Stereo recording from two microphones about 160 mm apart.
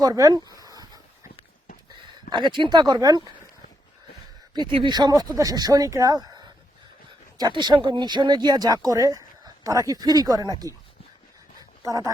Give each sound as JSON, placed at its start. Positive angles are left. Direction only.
{"t": 0.0, "sound": "speech", "side_deg": -20}
{"t": 0.6, "sound": "dog", "side_deg": -25}
{"t": 2.3, "sound": "speech", "side_deg": -30}
{"t": 4.5, "sound": "speech", "side_deg": -30}
{"t": 11.8, "sound": "speech", "side_deg": -20}